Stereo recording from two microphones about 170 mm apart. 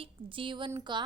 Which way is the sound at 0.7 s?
25° right (ahead or behind).